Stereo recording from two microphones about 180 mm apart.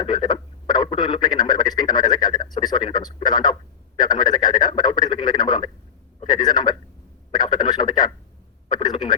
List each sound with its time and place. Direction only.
0.0 s speech: 25° left (ahead or behind)